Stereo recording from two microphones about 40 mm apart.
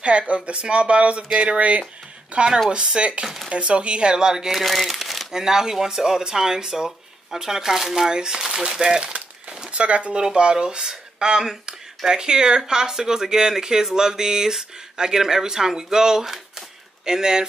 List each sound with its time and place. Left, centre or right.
0.3 s speech: right
4.6 s speech: centre
5.3 s speech: centre
9.7 s speech: right